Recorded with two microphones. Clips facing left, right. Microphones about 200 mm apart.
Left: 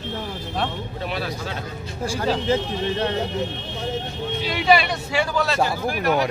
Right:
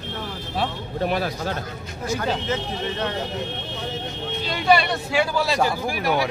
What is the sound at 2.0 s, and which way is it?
Speech, 30° left (ahead or behind).